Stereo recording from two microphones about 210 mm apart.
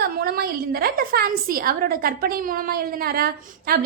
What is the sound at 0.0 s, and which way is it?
A woman's voice, 45° right (ahead or behind).